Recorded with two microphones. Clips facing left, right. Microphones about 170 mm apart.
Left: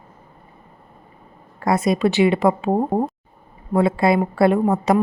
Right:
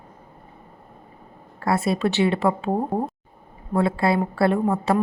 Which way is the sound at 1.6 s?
15° left (ahead or behind).